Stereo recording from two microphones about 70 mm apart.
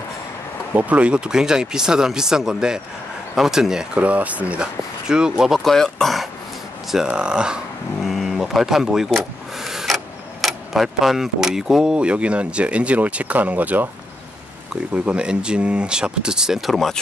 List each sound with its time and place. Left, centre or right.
0.7 s speech: right
4.0 s speech: right
5.6 s speech: centre
6.9 s speech: centre
8.0 s speech: centre
9.1 s a sound: centre
10.4 s speech: centre; by 13.8 s right
15.0 s speech: centre